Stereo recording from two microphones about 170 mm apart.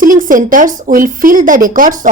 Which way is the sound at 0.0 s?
50° right (ahead or behind).